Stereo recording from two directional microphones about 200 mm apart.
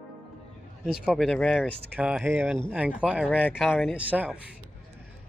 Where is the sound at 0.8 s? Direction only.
Centre (ahead or behind).